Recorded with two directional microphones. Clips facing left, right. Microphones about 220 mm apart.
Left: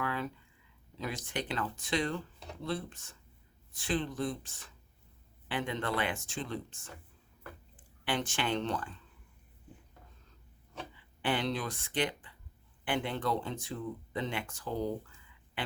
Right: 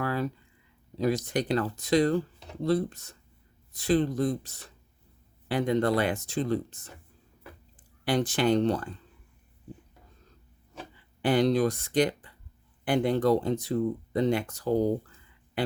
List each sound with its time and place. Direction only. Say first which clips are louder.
0.0 s a sound: right 6 dB; 40° right (ahead or behind)
0.9 s speech: right 11 dB; 40° right (ahead or behind)
8.0 s speech: right 9 dB; 40° right (ahead or behind)
11.2 s speech: right 10 dB; 40° right (ahead or behind)